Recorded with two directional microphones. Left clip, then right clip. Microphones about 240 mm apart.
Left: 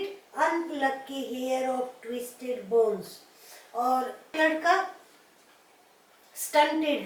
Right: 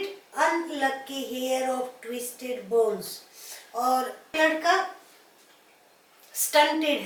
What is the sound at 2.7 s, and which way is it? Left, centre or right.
A woman's voice, centre.